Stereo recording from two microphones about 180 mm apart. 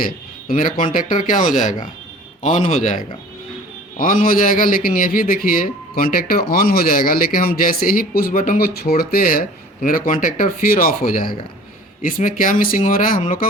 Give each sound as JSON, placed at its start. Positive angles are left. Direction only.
{"t": 0.0, "sound": "a man's voice", "side_deg": 50}